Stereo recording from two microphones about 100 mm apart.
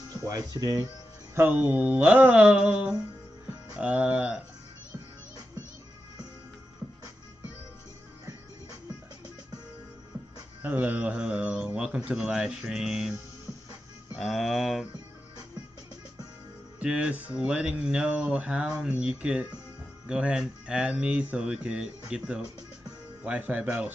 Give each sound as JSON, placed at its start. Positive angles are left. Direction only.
{"t": 0.1, "sound": "speech", "side_deg": -40}
{"t": 1.3, "sound": "speech", "side_deg": -20}
{"t": 10.6, "sound": "speech", "side_deg": -20}
{"t": 14.1, "sound": "speech", "side_deg": 0}
{"t": 16.8, "sound": "speech", "side_deg": -10}